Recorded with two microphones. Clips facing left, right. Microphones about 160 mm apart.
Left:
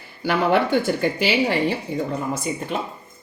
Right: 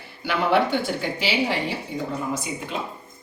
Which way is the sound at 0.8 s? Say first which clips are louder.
Left 6 dB; 50° left (ahead or behind).